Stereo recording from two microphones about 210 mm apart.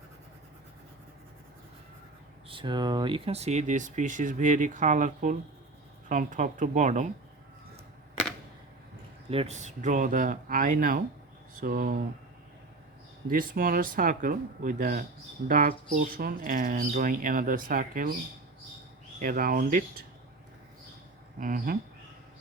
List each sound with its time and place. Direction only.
2.5 s speech: 20° right (ahead or behind)
9.3 s speech: 30° right (ahead or behind)
13.2 s speech: 40° right (ahead or behind)
19.2 s speech: 45° right (ahead or behind)
21.3 s speech: 40° right (ahead or behind)